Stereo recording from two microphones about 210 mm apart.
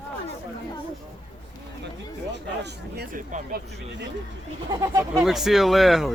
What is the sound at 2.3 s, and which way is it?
Speech, 50° right (ahead or behind).